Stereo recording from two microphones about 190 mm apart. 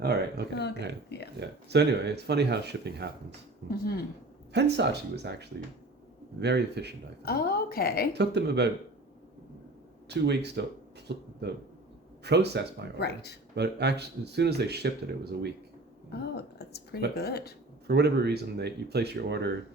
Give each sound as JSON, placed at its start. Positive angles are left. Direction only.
{"t": 0.0, "sound": "speech", "side_deg": -60}
{"t": 0.5, "sound": "speech", "side_deg": 60}
{"t": 1.4, "sound": "speech", "side_deg": -60}
{"t": 3.7, "sound": "a woman's voice", "side_deg": 55}
{"t": 4.5, "sound": "speech", "side_deg": -65}
{"t": 7.2, "sound": "a woman's voice", "side_deg": 55}
{"t": 8.1, "sound": "speech", "side_deg": -60}
{"t": 10.1, "sound": "speech", "side_deg": -60}
{"t": 13.0, "sound": "speech", "side_deg": 60}
{"t": 13.6, "sound": "speech", "side_deg": -60}
{"t": 16.1, "sound": "speech", "side_deg": 60}
{"t": 17.8, "sound": "speech", "side_deg": -60}